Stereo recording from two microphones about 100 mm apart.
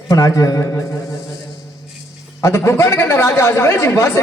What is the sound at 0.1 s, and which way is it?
Speech, 35° left (ahead or behind).